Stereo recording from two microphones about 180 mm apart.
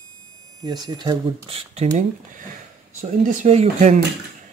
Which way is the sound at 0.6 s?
25° right (ahead or behind).